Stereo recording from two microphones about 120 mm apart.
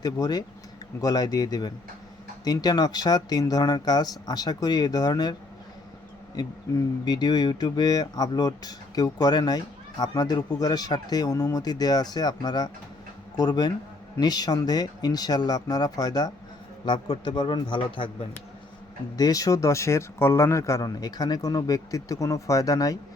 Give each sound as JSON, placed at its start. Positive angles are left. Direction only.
{"t": 0.0, "sound": "speech", "side_deg": 35}
{"t": 19.1, "sound": "speech", "side_deg": 30}